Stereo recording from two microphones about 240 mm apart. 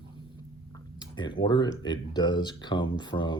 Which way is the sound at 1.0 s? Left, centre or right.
Centre.